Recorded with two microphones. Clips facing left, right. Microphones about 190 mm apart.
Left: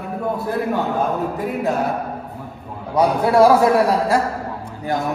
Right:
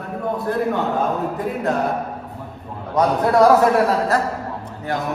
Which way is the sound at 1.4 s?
5° left (ahead or behind).